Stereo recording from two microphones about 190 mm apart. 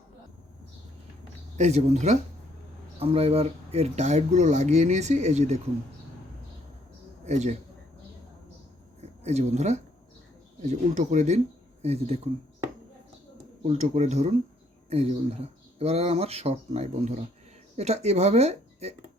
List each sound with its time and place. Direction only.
1.5 s speech: 35° right (ahead or behind)
7.3 s speech: 35° right (ahead or behind)
9.2 s speech: 35° right (ahead or behind)
13.7 s speech: 35° right (ahead or behind)
15.8 s speech: 30° right (ahead or behind)